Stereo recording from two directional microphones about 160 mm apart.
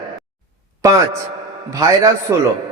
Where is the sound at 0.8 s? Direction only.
20° right (ahead or behind).